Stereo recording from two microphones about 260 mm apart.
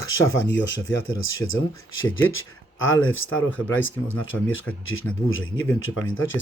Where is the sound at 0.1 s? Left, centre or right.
Left.